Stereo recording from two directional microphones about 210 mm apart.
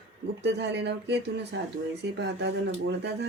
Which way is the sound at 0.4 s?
55° right (ahead or behind).